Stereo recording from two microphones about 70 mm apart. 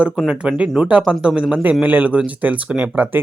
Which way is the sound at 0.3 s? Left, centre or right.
Centre.